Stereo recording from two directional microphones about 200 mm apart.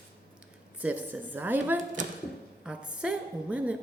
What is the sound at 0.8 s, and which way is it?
A woman's voice, 10° right (ahead or behind).